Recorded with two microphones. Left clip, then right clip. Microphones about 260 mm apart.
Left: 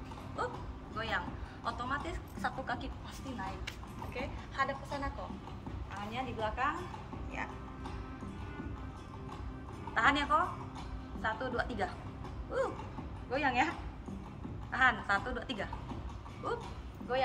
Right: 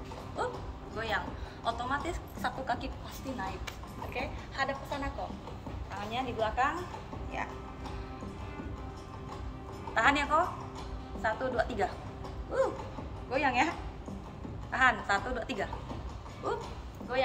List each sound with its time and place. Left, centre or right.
0.4 s bow-wow: centre
0.9 s a sound: centre
4.1 s a woman's voice: centre
9.9 s a woman's voice: centre
13.3 s a woman's voice: centre
17.1 s a woman's voice: centre